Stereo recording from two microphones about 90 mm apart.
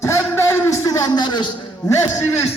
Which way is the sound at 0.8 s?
50° left (ahead or behind).